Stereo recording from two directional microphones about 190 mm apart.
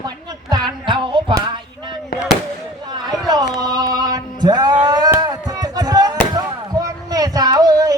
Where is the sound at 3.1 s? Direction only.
20° right (ahead or behind).